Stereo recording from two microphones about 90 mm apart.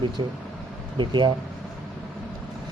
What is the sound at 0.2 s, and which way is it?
Speech, 70° right (ahead or behind).